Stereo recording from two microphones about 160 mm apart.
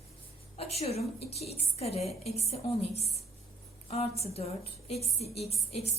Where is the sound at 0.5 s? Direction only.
40° left (ahead or behind).